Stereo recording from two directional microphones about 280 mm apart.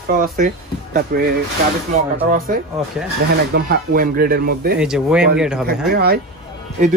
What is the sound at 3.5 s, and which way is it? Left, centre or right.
A man's voice, right.